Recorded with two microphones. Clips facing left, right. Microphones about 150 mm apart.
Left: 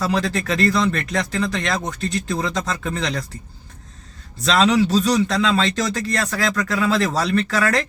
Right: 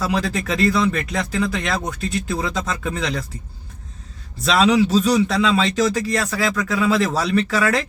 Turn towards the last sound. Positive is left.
turn(degrees=-5)  # may be behind; listen again after turning